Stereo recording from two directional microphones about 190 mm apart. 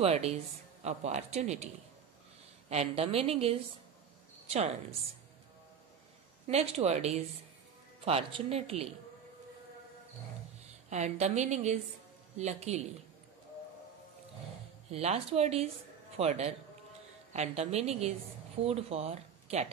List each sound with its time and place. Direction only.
0.0 s a woman's voice: 35° right (ahead or behind)
2.7 s a woman's voice: 30° right (ahead or behind)
6.4 s a woman's voice: 35° right (ahead or behind)
10.9 s a woman's voice: 35° right (ahead or behind)
14.9 s a woman's voice: 35° right (ahead or behind)